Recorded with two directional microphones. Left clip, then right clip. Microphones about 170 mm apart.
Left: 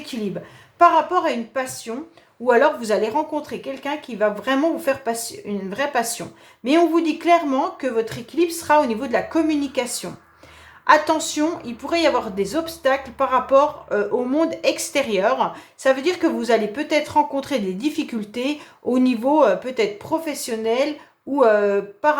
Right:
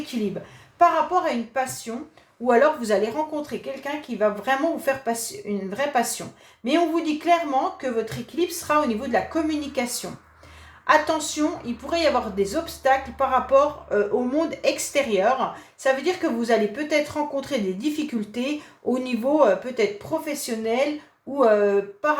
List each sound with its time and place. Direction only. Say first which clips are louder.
0.8 s speech: left 4 dB; 35° left (ahead or behind)